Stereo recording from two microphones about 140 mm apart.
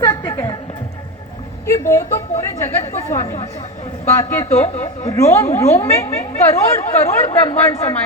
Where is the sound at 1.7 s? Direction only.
20° left (ahead or behind).